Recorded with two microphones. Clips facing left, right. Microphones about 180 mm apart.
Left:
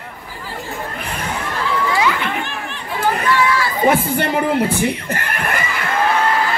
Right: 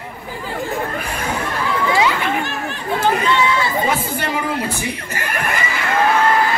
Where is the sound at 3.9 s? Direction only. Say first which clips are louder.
Left 4 dB; 55° left (ahead or behind).